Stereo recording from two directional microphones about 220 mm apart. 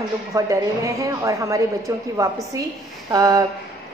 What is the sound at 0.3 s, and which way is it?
A woman's voice, 15° right (ahead or behind).